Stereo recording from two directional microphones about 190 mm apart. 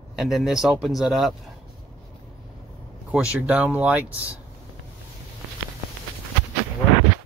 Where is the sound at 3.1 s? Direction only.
5° right (ahead or behind).